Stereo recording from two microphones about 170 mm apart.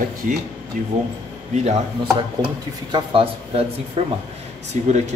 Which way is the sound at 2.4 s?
30° right (ahead or behind).